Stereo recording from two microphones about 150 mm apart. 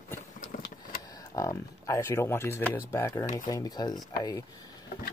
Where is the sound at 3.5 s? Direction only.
25° left (ahead or behind).